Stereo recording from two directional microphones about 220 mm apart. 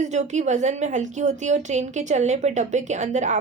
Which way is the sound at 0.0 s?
30° right (ahead or behind).